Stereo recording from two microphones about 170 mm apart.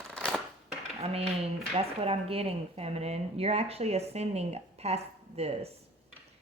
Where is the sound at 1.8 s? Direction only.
35° right (ahead or behind).